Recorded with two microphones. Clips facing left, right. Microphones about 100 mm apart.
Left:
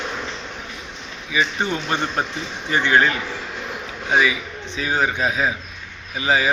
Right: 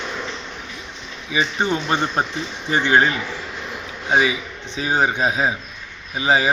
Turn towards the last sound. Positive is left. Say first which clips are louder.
# right 2 dB
turn(degrees=-25)  # may be behind; listen again after turning